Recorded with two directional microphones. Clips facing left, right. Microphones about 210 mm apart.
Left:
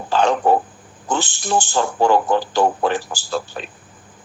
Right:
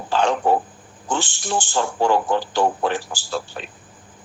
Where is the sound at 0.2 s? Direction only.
40° left (ahead or behind).